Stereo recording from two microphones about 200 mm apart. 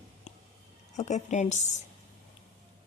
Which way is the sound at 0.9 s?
35° left (ahead or behind).